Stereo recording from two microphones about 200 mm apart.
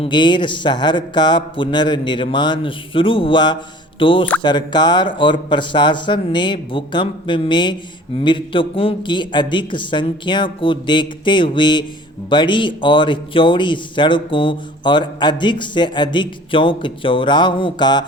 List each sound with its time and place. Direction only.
0.0 s speech: 25° left (ahead or behind)